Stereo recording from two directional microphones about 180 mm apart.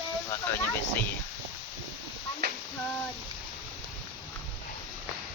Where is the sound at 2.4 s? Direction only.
60° right (ahead or behind).